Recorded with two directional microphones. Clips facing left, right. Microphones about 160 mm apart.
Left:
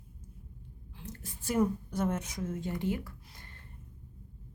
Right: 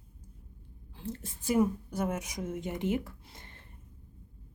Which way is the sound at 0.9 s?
30° right (ahead or behind).